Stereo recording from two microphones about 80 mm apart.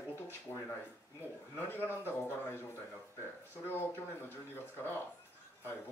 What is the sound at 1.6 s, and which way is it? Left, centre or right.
Speech, left.